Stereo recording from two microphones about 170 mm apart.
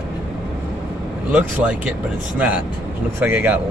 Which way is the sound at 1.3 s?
10° right (ahead or behind).